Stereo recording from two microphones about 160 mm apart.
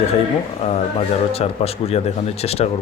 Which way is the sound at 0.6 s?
40° left (ahead or behind).